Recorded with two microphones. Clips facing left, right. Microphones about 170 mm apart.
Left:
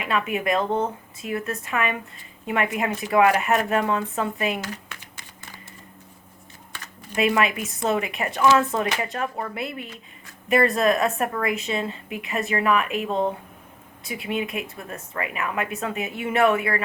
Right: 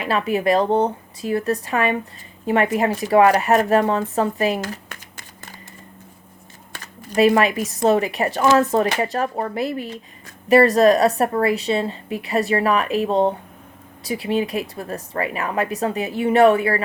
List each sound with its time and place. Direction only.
0.0 s speech: 35° right (ahead or behind)
6.7 s speech: 40° right (ahead or behind)